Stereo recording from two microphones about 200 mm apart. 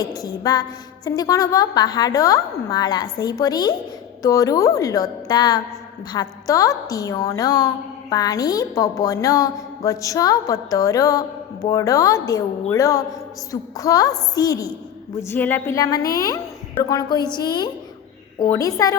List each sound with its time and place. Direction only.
0.2 s a woman's voice: 20° left (ahead or behind)